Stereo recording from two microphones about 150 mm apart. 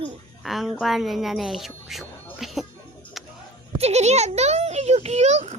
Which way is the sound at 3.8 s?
45° right (ahead or behind).